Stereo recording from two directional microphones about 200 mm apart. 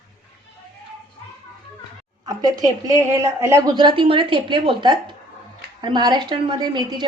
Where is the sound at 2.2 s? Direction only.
20° right (ahead or behind).